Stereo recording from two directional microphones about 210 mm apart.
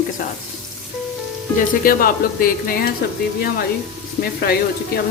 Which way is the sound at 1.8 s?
45° left (ahead or behind).